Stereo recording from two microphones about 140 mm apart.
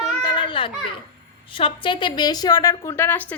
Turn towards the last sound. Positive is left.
turn(degrees=15)  # may be behind; listen again after turning